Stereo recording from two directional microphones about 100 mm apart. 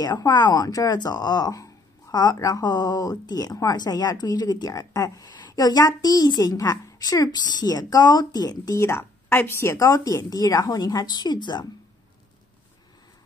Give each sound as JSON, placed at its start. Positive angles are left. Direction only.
{"t": 0.0, "sound": "speech", "side_deg": 40}